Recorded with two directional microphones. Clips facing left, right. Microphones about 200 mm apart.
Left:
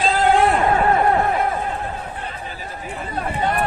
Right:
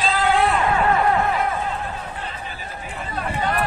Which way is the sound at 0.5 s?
35° left (ahead or behind).